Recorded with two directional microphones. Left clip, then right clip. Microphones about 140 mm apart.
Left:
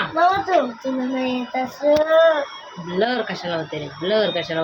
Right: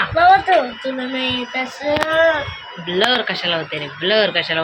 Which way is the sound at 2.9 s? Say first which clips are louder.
Right 4 dB; centre (ahead or behind).